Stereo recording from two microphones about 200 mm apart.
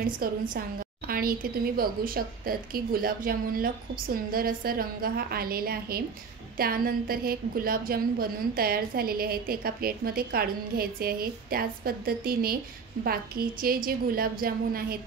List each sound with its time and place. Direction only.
0.0 s a woman's voice: 45° right (ahead or behind)